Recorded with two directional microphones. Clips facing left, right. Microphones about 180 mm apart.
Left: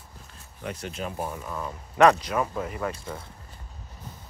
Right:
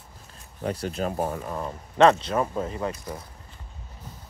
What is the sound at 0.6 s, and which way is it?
Speech, 35° right (ahead or behind).